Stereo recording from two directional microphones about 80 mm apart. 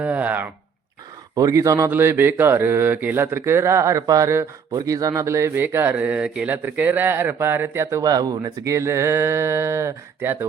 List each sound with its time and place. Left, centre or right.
0.0 s a sound: centre
1.4 s speech: right
1.9 s speech: right
5.5 s speech: right
8.0 s speech: right
8.6 s speech: right